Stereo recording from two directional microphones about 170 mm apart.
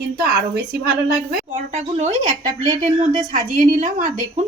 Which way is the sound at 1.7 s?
40° right (ahead or behind).